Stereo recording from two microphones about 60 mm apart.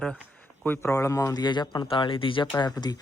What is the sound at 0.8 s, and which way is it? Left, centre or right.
Speech, left.